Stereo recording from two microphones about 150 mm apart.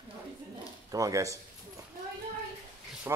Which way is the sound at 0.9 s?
20° right (ahead or behind).